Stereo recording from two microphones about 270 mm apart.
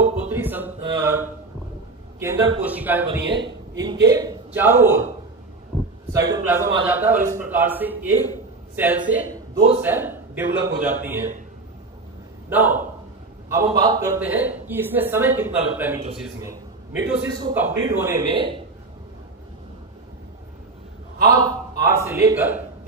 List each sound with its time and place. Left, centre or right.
0.0 s music: centre
0.8 s mantra: centre
2.1 s a man's voice: centre
3.2 s a man's voice: right
3.4 s a man's voice: centre
6.1 s a man's voice: centre
12.4 s a man's voice: centre
21.3 s a man's voice: centre